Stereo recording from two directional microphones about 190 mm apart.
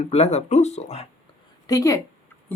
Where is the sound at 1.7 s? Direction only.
15° left (ahead or behind).